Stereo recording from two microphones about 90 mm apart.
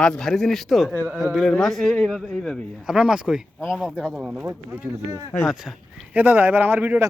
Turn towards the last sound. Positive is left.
turn(degrees=-25)  # may be behind; listen again after turning